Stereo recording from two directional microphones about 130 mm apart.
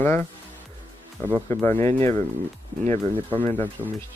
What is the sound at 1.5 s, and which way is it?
Speech, 20° left (ahead or behind).